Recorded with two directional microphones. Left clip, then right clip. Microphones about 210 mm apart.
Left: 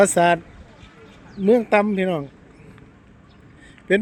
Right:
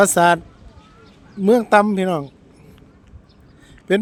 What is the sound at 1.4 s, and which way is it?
Speech, 20° right (ahead or behind).